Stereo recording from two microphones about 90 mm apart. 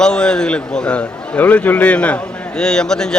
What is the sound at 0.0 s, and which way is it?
A man's voice, 10° left (ahead or behind).